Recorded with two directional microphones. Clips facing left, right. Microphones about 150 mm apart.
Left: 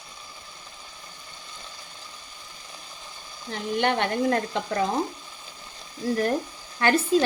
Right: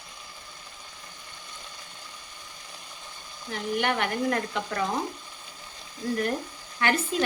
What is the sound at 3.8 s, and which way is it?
Stir, 30° left (ahead or behind).